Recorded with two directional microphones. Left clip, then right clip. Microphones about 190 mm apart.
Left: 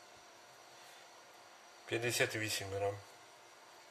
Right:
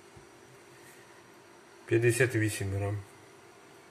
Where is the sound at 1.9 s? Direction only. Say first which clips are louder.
Right 8 dB; 5° left (ahead or behind).